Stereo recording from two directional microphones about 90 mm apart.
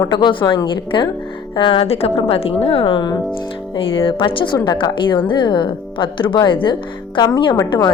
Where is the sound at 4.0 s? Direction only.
75° left (ahead or behind).